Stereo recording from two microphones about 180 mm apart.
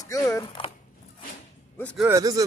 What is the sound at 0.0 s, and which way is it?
Speech, 20° left (ahead or behind).